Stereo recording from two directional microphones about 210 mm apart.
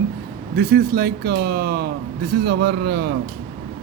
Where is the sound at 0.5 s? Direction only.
50° right (ahead or behind).